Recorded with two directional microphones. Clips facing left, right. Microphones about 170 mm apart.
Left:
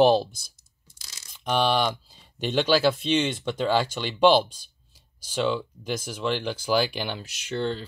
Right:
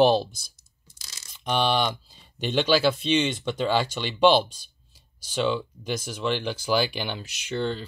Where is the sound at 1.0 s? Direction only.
10° left (ahead or behind).